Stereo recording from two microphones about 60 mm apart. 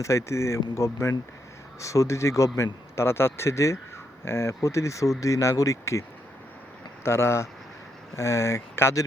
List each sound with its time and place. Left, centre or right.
0.0 s speech: left